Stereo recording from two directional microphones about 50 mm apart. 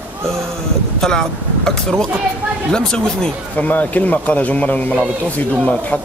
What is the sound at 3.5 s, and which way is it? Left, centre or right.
A man's voice, left.